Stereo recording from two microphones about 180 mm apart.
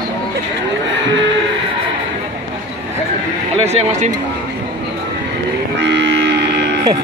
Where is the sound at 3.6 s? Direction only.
35° right (ahead or behind).